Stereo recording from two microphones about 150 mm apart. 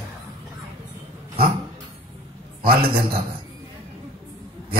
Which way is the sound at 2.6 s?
90° right.